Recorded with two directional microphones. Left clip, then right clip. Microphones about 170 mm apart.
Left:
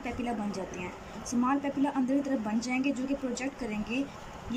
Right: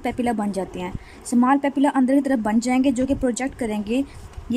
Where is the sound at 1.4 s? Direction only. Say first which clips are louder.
Right 10 dB; 50° right (ahead or behind).